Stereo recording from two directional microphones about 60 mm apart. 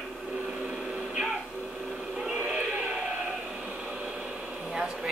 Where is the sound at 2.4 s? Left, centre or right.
Centre.